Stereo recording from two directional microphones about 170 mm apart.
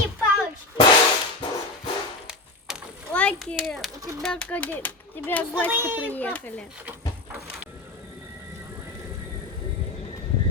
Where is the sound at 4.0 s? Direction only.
20° right (ahead or behind).